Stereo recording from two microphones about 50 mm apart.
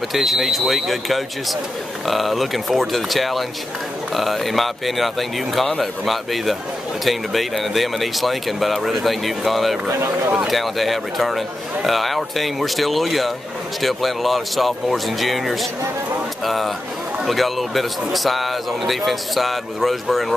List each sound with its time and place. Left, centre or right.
0.1 s speech: centre
9.8 s speech: right
10.4 s speech: centre